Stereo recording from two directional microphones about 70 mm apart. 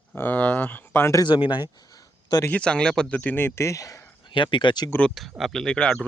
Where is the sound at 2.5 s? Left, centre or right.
Centre.